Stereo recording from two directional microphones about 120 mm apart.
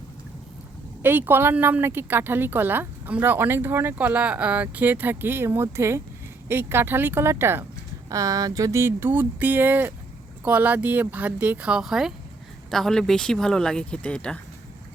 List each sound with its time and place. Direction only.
1.0 s a woman's voice: 15° right (ahead or behind); by 14.3 s 10° left (ahead or behind)